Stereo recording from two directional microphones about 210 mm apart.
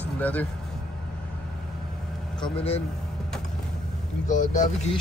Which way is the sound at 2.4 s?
25° left (ahead or behind).